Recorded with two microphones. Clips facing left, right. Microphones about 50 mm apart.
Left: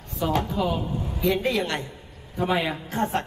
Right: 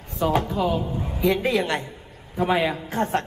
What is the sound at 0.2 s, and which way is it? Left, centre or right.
A man's voice, centre.